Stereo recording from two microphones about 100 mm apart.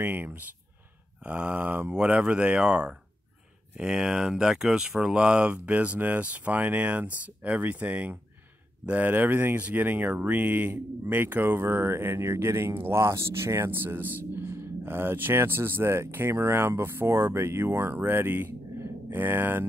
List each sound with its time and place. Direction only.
0.0 s speech: 20° right (ahead or behind)